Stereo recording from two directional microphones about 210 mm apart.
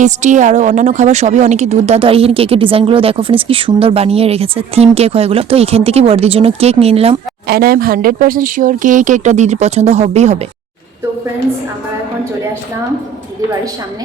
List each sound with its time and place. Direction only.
0.0 s a woman's voice: 35° right (ahead or behind)
7.4 s speech: 45° right (ahead or behind)